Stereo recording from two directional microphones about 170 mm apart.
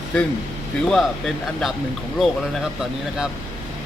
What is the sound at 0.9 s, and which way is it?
Speech, 5° left (ahead or behind).